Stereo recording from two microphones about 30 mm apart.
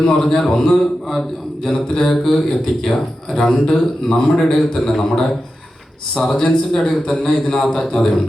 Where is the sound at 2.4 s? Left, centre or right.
Centre; by 3.7 s left.